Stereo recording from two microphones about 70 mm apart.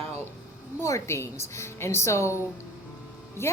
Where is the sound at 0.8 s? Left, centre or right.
Left.